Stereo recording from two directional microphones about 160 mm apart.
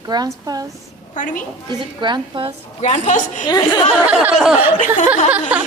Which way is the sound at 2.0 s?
30° right (ahead or behind).